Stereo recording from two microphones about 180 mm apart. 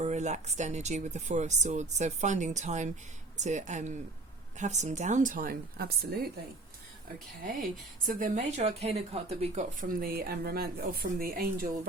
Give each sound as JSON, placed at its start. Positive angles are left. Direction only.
{"t": 0.0, "sound": "speech", "side_deg": -40}
{"t": 7.4, "sound": "speech", "side_deg": -50}
{"t": 9.8, "sound": "speech", "side_deg": -50}